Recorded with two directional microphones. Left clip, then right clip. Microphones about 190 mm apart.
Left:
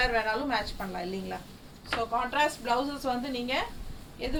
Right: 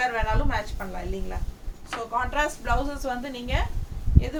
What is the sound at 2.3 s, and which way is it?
A woman's voice, 15° right (ahead or behind).